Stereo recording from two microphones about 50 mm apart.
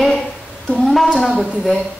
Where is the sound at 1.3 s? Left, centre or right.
Centre.